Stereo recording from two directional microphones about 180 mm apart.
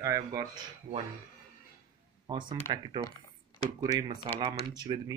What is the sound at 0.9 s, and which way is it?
Speech, 35° right (ahead or behind).